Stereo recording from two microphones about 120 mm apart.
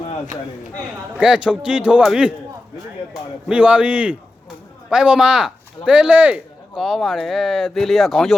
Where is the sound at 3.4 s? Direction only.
10° right (ahead or behind).